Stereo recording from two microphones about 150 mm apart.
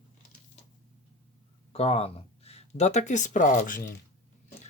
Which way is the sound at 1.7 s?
40° left (ahead or behind).